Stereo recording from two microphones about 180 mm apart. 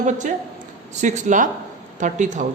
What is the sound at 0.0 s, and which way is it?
A man's voice, 40° right (ahead or behind).